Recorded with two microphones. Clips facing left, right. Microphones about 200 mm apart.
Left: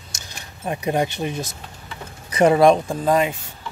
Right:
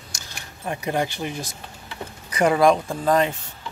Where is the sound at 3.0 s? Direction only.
10° left (ahead or behind).